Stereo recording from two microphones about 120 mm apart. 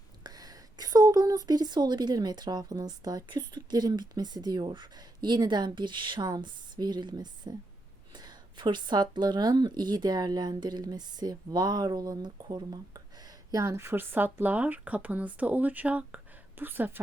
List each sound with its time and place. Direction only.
0.2 s a woman's voice: 35° right (ahead or behind); by 17.0 s 15° right (ahead or behind)